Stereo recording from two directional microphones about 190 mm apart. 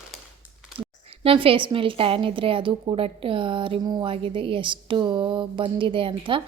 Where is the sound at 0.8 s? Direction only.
30° right (ahead or behind).